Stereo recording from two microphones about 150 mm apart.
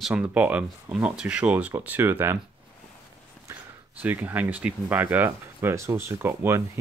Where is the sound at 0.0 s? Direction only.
10° right (ahead or behind).